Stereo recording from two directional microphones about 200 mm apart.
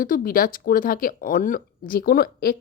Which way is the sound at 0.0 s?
45° left (ahead or behind).